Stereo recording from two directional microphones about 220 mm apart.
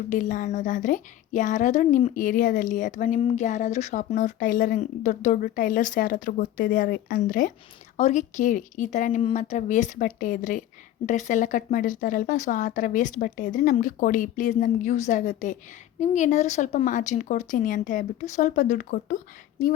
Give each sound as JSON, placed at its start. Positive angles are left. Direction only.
{"t": 0.1, "sound": "a woman's voice", "side_deg": 35}